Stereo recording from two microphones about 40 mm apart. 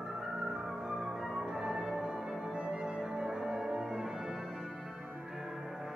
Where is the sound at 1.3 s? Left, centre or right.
Centre.